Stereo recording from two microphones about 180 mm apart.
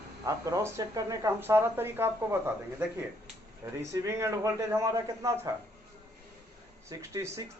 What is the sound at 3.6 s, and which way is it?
A man's voice, 15° right (ahead or behind).